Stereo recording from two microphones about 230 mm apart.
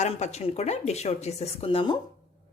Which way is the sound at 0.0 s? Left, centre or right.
Left.